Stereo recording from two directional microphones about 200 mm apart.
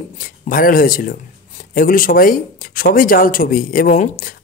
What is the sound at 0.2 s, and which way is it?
Speech, 45° left (ahead or behind).